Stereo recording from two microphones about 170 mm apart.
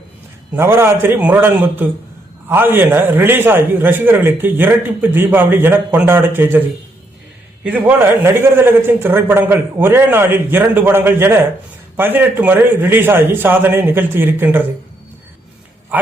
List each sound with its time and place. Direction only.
0.5 s a man's voice: 15° right (ahead or behind)
15.9 s dog: 10° right (ahead or behind)